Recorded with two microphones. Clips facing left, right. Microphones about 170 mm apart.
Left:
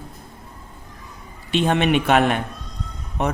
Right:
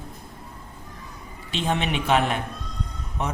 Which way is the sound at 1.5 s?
60° left (ahead or behind).